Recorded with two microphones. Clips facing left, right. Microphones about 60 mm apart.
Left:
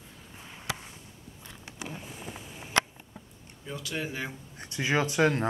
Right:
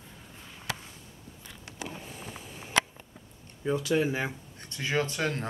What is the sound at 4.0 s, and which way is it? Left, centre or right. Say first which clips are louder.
Speech: right 6 dB; right.